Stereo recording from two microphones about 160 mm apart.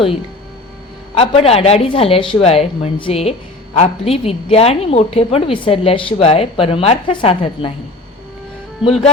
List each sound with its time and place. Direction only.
1.1 s a woman's voice: 40° left (ahead or behind)